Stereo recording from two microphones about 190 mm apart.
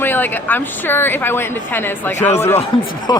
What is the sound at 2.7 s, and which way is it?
Speech, 25° left (ahead or behind).